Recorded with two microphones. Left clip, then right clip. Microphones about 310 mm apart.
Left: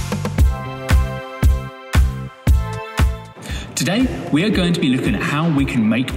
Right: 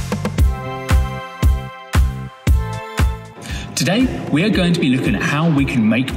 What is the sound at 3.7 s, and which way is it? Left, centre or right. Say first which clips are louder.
Speech: right 2 dB; centre.